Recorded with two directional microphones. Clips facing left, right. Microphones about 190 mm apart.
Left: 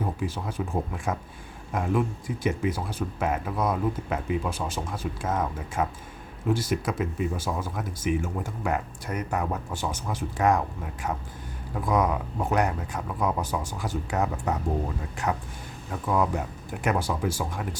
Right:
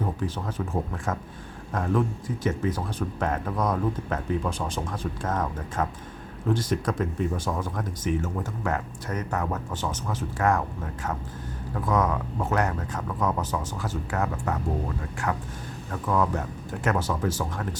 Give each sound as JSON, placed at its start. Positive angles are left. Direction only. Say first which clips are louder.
{"t": 0.0, "sound": "speech", "louder": "right 1 dB", "side_deg": 10}
{"t": 11.7, "sound": "speech", "louder": "even", "side_deg": 10}